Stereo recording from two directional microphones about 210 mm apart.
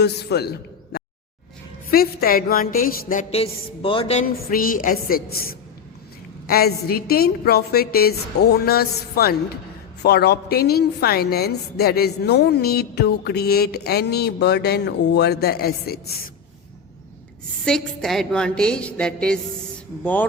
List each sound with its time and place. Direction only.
0.0 s a man's voice: 50° left (ahead or behind); by 4.3 s 30° left (ahead or behind)
4.5 s a woman's voice: 40° left (ahead or behind)
17.7 s a woman's voice: centre (ahead or behind)